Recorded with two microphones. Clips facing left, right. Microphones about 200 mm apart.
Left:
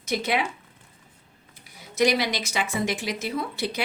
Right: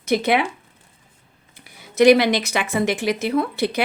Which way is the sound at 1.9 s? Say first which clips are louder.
Right 9 dB; 60° right (ahead or behind).